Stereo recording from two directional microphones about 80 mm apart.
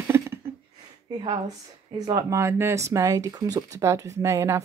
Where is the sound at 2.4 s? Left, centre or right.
Right.